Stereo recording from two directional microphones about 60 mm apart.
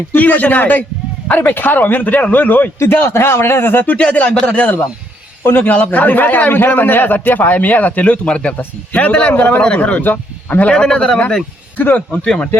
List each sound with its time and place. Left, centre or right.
0.1 s a man's voice: left
2.7 s a man's voice: left
3.9 s a man's voice: left
5.4 s a man's voice: left; by 10.0 s centre
10.0 s speech: left
10.7 s speech: centre
11.8 s a man's voice: left
12.2 s speech: centre